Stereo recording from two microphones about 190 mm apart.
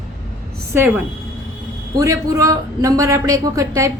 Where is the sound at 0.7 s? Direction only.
10° right (ahead or behind).